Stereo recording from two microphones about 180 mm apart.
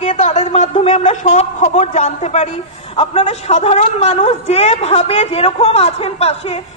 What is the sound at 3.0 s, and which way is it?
A woman's voice, 35° left (ahead or behind).